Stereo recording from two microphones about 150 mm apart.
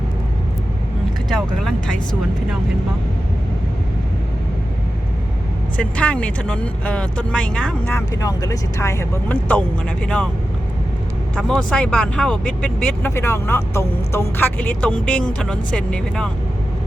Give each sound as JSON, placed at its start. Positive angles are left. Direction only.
{"t": 5.7, "sound": "speech", "side_deg": 10}
{"t": 8.2, "sound": "speech", "side_deg": 25}
{"t": 11.3, "sound": "speech", "side_deg": 5}